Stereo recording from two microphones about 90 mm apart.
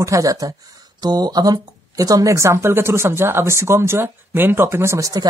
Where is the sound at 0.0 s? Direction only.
35° right (ahead or behind).